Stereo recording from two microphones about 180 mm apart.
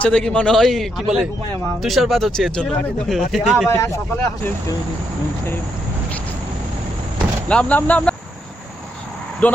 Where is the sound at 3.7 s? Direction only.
15° left (ahead or behind).